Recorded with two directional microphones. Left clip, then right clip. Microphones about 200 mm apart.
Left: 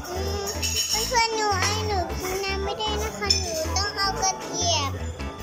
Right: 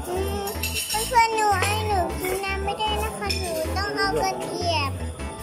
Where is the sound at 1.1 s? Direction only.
5° right (ahead or behind).